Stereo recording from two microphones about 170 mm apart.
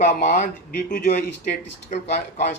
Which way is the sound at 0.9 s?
75° left (ahead or behind).